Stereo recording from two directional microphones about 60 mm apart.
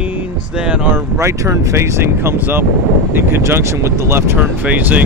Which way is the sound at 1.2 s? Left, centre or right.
Right.